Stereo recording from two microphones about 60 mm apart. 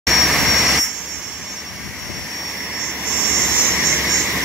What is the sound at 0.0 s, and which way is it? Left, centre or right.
Jet engine, centre.